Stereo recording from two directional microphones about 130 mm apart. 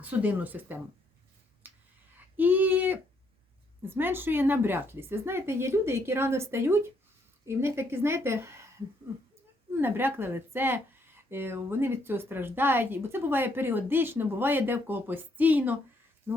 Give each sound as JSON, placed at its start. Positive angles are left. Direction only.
{"t": 0.0, "sound": "speech", "side_deg": -15}
{"t": 1.6, "sound": "a sound", "side_deg": -15}
{"t": 2.1, "sound": "female singing", "side_deg": -15}
{"t": 3.8, "sound": "a woman's voice", "side_deg": -15}
{"t": 9.7, "sound": "speech", "side_deg": -15}